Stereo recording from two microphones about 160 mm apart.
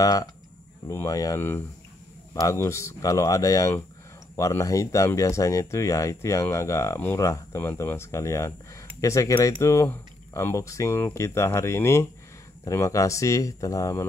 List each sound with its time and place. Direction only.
0.0 s speech: 25° left (ahead or behind)